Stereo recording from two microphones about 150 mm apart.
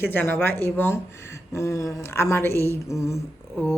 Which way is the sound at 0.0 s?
15° left (ahead or behind).